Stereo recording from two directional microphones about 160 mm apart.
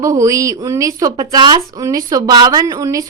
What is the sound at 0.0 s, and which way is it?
A woman's voice, 20° right (ahead or behind).